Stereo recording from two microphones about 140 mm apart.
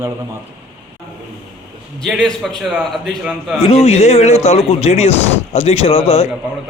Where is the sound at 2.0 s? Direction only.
5° left (ahead or behind).